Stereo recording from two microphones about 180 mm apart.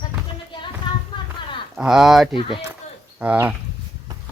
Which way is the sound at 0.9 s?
25° left (ahead or behind).